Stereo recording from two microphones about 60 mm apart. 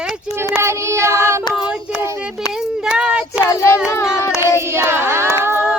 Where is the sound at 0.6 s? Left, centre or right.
Right.